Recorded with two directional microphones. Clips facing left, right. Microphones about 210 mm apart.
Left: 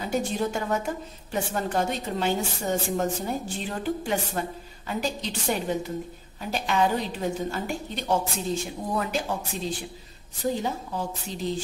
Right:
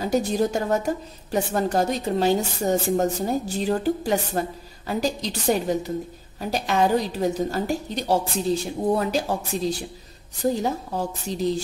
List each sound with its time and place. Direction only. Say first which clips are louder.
0.0 s a woman's voice: right 5 dB; 40° right (ahead or behind)